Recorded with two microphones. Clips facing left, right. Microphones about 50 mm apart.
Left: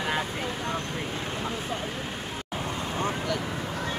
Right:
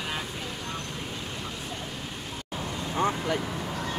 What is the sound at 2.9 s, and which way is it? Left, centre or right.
Vehicle, right.